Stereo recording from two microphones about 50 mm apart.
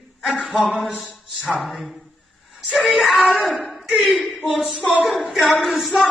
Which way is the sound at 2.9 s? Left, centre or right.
Centre.